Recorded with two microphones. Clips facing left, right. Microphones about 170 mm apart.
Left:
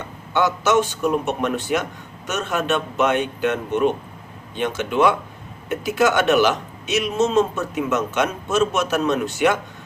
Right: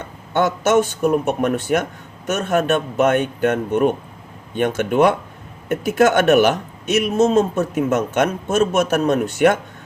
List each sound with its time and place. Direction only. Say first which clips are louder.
0.3 s a man's voice: right 2 dB; 50° right (ahead or behind)